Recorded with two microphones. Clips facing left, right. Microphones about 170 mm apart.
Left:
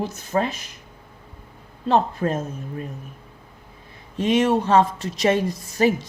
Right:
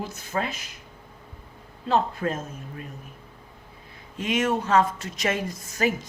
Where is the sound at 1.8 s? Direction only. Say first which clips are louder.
Left 4 dB; 35° left (ahead or behind).